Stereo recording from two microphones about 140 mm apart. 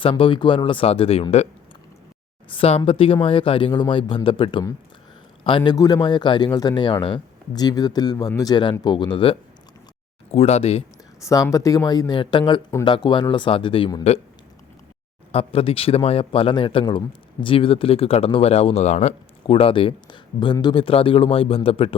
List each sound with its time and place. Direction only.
0.0 s speech: 40° left (ahead or behind)
2.5 s a man's voice: 45° left (ahead or behind)
5.7 s speech: 25° left (ahead or behind)
10.3 s speech: 50° left (ahead or behind)
11.2 s speech: 20° left (ahead or behind); by 14.2 s 45° left (ahead or behind)
15.3 s speech: 45° left (ahead or behind)